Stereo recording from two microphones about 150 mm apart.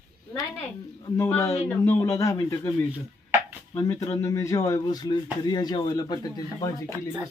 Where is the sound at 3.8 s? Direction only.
20° left (ahead or behind).